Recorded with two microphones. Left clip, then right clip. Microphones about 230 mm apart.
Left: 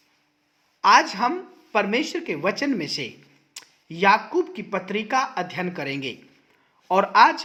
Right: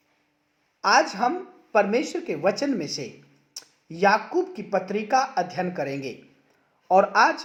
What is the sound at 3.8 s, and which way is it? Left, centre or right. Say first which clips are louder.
A man's voice: left 2 dB; left.